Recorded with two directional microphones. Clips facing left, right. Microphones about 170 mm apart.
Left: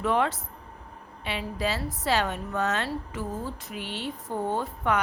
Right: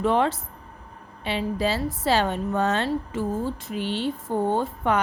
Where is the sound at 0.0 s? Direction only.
30° right (ahead or behind).